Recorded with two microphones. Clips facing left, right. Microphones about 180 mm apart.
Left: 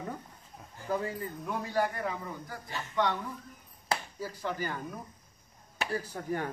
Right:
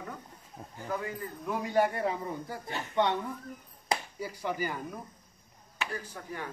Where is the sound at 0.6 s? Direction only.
35° right (ahead or behind).